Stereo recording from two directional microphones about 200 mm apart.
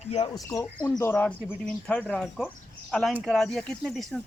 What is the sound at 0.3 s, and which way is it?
Speech, 15° left (ahead or behind).